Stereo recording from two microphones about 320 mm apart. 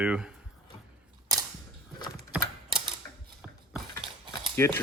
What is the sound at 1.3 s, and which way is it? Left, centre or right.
Cap gun, centre.